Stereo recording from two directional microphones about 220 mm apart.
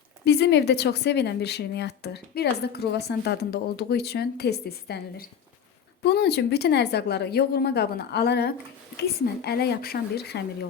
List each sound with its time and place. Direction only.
0.3 s speech: 50° left (ahead or behind)